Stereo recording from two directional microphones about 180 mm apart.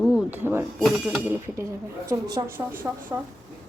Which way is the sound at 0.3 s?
10° right (ahead or behind).